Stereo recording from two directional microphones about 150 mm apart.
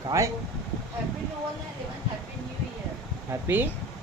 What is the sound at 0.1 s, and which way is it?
Speech, 20° right (ahead or behind).